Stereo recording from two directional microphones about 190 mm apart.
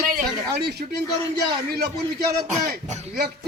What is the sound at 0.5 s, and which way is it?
Speech, 60° right (ahead or behind).